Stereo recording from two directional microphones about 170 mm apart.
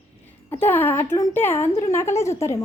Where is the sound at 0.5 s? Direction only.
15° left (ahead or behind).